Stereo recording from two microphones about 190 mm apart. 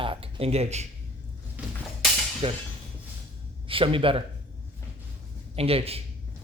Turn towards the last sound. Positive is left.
turn(degrees=-30)  # may be behind; listen again after turning